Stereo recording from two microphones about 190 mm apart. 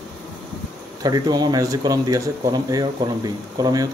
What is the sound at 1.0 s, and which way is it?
Speech, 20° right (ahead or behind).